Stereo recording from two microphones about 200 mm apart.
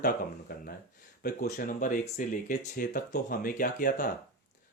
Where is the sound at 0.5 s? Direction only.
50° left (ahead or behind).